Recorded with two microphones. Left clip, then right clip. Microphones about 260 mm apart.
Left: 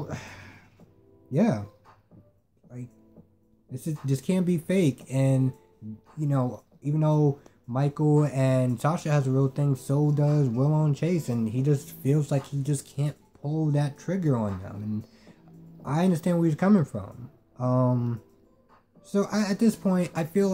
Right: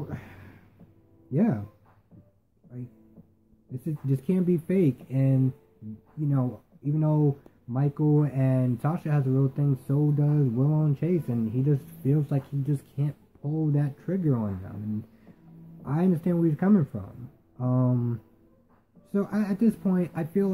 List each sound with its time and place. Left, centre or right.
0.0 s a sound: centre
1.3 s speech: centre
3.7 s speech: centre
15.8 s speech: centre